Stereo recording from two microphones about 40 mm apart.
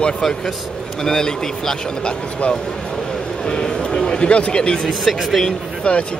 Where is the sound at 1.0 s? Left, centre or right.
Centre.